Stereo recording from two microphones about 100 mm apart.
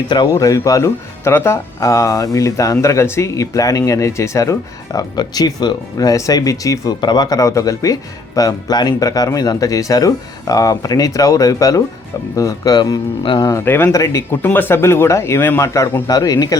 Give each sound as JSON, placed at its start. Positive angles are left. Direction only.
{"t": 0.3, "sound": "speech", "side_deg": 35}
{"t": 4.9, "sound": "speech", "side_deg": 45}
{"t": 13.5, "sound": "speech", "side_deg": 25}